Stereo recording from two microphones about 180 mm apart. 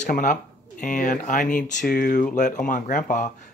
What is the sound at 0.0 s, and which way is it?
Speech, 45° left (ahead or behind).